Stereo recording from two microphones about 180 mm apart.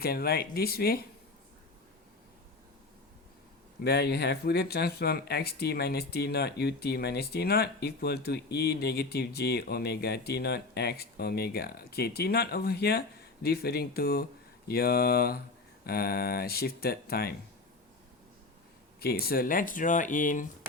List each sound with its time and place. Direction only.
0.0 s speech: 60° left (ahead or behind)
3.8 s speech: 60° left (ahead or behind)
18.9 s speech: 60° left (ahead or behind)